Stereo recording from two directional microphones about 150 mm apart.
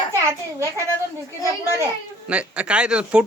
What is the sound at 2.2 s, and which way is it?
Speech, 10° right (ahead or behind).